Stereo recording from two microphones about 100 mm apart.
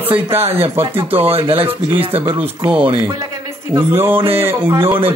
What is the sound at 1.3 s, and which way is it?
Speech, 75° right (ahead or behind).